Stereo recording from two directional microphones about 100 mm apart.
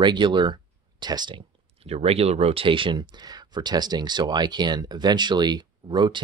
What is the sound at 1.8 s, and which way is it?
Speech, 90° right.